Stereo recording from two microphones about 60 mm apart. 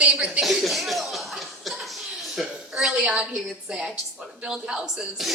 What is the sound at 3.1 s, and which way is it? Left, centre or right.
Speech, centre.